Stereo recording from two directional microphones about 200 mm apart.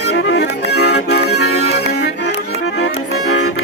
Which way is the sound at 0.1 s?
60° left (ahead or behind).